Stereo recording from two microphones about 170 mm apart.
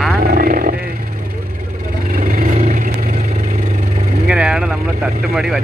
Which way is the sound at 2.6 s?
50° right (ahead or behind).